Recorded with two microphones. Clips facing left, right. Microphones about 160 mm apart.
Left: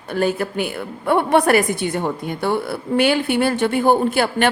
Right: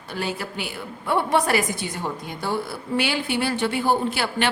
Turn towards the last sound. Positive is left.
turn(degrees=50)  # may be behind; listen again after turning